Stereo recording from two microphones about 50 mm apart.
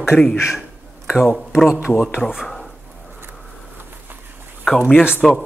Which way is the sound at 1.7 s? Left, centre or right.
Right.